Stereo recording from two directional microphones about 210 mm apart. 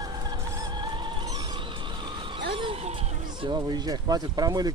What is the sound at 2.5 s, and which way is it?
Speech, 25° right (ahead or behind).